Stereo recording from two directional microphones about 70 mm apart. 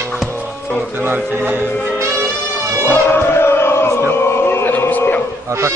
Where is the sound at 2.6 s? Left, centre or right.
Right.